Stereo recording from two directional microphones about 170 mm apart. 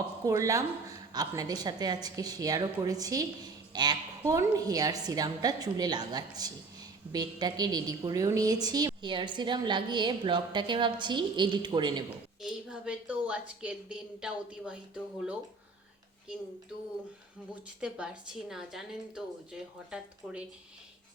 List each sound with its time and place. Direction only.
0.3 s a woman's voice: 20° right (ahead or behind)
12.4 s a woman's voice: 5° right (ahead or behind)
17.5 s a woman's voice: 5° right (ahead or behind)